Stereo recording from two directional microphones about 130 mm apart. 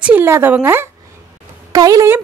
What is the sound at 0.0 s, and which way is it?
Speech, 15° right (ahead or behind).